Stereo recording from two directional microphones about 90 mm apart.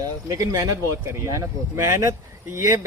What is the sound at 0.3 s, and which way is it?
Speech, 40° right (ahead or behind).